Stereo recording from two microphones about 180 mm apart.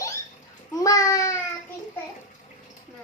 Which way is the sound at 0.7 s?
20° left (ahead or behind).